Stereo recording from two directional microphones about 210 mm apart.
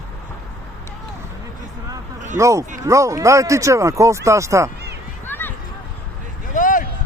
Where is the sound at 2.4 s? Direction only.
15° right (ahead or behind).